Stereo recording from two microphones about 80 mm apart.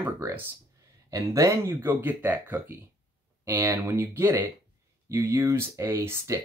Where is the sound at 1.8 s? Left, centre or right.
Right.